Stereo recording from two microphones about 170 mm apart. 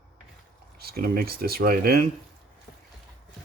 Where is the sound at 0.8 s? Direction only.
65° right (ahead or behind).